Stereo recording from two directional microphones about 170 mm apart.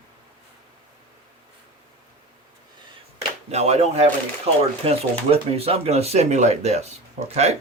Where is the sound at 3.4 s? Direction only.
40° right (ahead or behind).